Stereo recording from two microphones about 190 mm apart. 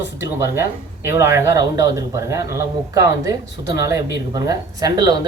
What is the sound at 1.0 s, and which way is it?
A man's voice, 15° right (ahead or behind).